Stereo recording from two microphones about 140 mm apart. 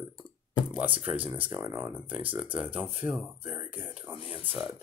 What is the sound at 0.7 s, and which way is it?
Speech, 10° right (ahead or behind).